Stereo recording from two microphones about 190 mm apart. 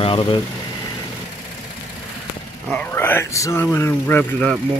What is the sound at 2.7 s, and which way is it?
Speech, 10° left (ahead or behind).